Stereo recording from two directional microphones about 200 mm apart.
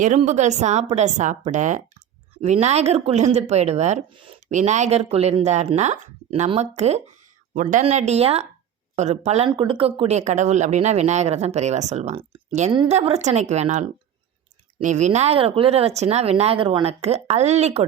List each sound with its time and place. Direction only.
0.0 s speech: 35° right (ahead or behind)